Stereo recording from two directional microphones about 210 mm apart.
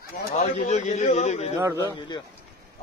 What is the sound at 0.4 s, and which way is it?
A man's voice, 30° left (ahead or behind).